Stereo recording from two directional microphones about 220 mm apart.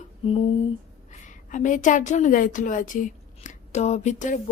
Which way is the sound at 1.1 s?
35° left (ahead or behind).